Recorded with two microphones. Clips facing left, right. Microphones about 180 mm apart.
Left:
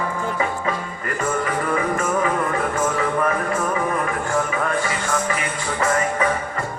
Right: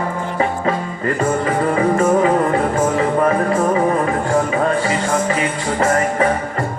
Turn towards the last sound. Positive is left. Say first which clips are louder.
# right 5 dB
turn(degrees=-35)  # may be behind; listen again after turning